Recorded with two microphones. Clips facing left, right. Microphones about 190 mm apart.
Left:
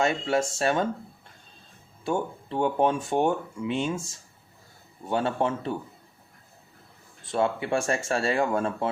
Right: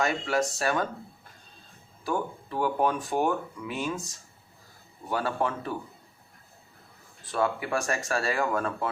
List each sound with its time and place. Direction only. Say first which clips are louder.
0.0 s speech: left 2 dB; 25° left (ahead or behind)
2.0 s speech: left 2 dB; 25° left (ahead or behind)
7.3 s speech: left 2 dB; 25° left (ahead or behind)